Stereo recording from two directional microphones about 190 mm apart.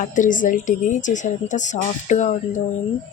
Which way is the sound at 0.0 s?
45° left (ahead or behind).